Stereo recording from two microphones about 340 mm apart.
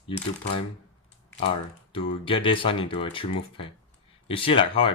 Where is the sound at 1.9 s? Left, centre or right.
Centre.